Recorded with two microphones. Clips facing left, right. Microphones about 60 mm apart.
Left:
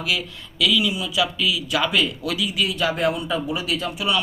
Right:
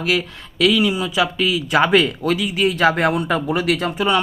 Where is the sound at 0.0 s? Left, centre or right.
Right.